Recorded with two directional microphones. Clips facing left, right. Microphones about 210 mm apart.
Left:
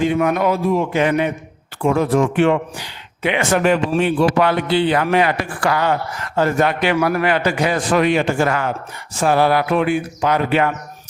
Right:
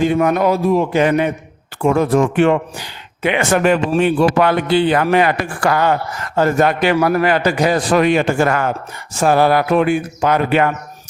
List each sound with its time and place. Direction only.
0.0 s a man's voice: 40° right (ahead or behind)